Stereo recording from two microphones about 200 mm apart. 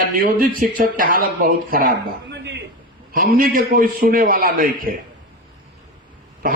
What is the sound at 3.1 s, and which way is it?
A man's voice, 45° right (ahead or behind).